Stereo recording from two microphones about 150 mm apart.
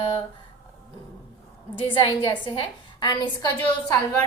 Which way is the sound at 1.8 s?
35° left (ahead or behind).